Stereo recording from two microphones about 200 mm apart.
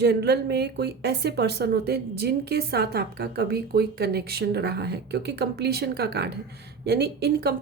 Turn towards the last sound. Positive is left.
turn(degrees=-55)  # may be behind; listen again after turning